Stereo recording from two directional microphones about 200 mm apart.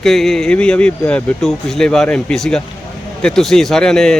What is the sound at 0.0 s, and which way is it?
Speech, centre (ahead or behind).